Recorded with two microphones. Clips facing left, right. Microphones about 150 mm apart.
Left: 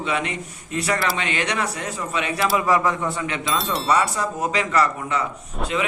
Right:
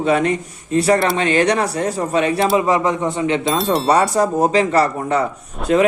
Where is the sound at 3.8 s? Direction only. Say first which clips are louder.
Right 6 dB; 35° right (ahead or behind).